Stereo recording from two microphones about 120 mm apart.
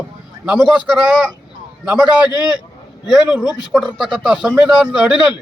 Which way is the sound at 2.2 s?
35° left (ahead or behind).